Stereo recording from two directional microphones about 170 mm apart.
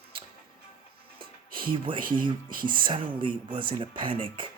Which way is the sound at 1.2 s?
55° right (ahead or behind).